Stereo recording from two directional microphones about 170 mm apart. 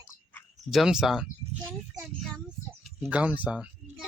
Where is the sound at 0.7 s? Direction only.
5° right (ahead or behind).